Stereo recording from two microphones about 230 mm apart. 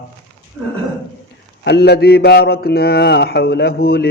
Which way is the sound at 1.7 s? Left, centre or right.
Left.